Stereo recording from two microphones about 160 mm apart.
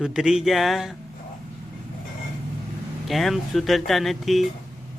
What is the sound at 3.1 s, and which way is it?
Speech, centre (ahead or behind).